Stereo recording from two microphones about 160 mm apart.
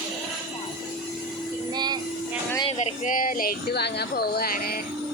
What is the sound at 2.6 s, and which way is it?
Speech, 40° left (ahead or behind).